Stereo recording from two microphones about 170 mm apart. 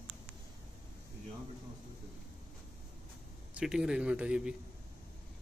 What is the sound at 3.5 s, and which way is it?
Speech, 5° right (ahead or behind).